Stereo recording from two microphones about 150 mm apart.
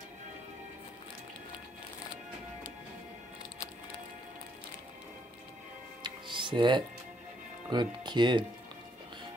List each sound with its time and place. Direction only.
6.0 s music: 30° right (ahead or behind)
7.7 s speech: 30° right (ahead or behind)